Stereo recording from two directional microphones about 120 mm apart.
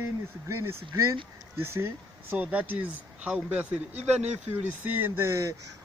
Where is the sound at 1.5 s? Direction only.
20° right (ahead or behind).